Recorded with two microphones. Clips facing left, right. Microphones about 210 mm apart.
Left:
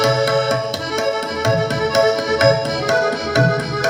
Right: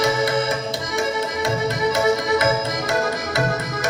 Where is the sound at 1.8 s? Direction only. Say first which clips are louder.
Left 2 dB; 75° left (ahead or behind).